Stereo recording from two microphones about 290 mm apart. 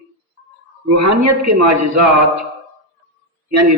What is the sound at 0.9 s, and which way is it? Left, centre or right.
Speech, right.